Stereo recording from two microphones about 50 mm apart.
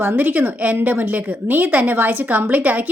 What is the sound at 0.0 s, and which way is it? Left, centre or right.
A woman's voice, right.